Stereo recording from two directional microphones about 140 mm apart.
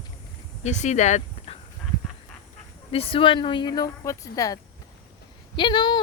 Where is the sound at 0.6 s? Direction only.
55° left (ahead or behind).